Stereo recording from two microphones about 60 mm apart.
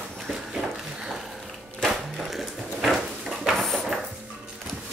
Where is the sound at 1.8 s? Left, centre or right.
Centre.